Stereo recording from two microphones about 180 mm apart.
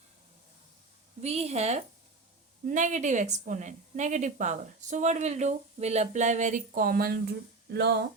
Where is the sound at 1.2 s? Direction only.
35° right (ahead or behind); by 7.2 s 55° right (ahead or behind).